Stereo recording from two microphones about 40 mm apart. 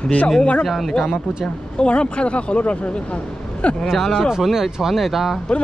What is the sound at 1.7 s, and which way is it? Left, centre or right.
Speech, left.